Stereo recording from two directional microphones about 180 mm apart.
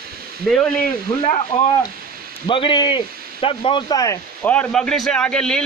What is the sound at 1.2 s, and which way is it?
A man's voice, 35° left (ahead or behind).